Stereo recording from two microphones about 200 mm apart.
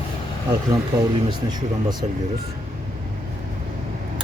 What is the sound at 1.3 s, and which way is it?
Speech, 20° right (ahead or behind).